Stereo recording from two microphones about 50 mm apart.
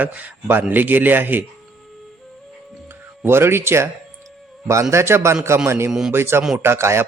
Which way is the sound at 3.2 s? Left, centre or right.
Right.